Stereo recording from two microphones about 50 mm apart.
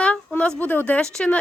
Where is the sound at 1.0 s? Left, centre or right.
Centre.